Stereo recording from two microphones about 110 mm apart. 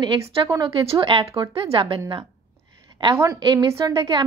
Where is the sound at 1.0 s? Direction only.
45° right (ahead or behind).